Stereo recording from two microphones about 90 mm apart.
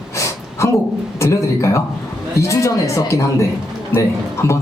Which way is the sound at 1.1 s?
35° left (ahead or behind).